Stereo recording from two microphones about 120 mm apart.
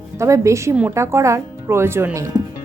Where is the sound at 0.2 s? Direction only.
25° right (ahead or behind).